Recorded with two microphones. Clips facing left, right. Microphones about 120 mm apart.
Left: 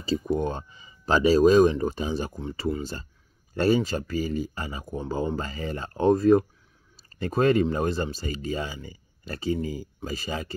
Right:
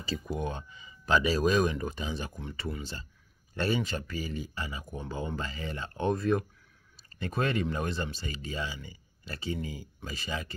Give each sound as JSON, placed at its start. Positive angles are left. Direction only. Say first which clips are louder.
{"t": 0.0, "sound": "speech", "louder": "left 8 dB", "side_deg": 30}